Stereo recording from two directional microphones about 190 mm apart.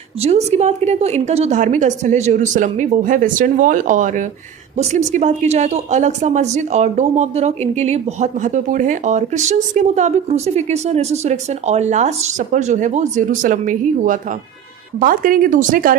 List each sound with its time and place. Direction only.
0.2 s speech: 35° right (ahead or behind)